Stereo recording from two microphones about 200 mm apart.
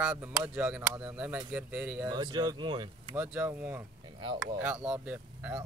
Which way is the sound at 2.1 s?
20° right (ahead or behind).